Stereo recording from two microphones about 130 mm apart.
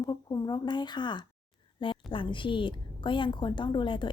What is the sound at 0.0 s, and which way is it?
A woman's voice, 30° left (ahead or behind).